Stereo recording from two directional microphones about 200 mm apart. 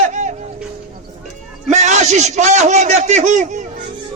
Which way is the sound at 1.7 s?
35° right (ahead or behind).